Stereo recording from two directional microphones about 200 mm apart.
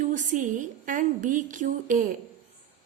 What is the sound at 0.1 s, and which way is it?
A woman's voice, 40° right (ahead or behind).